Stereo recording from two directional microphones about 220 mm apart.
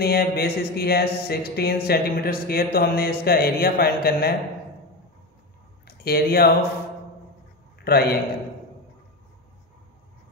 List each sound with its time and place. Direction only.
0.0 s a sound: 45° left (ahead or behind)
5.9 s speech: 45° left (ahead or behind)
7.8 s a man's voice: 45° left (ahead or behind)